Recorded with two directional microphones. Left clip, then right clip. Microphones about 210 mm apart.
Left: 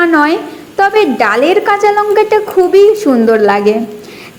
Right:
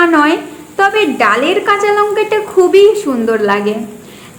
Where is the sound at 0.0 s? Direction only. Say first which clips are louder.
Even; 25° left (ahead or behind).